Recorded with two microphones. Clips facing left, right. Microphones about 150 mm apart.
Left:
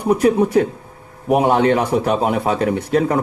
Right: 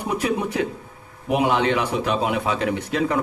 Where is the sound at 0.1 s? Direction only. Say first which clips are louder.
Left 10 dB; 45° left (ahead or behind).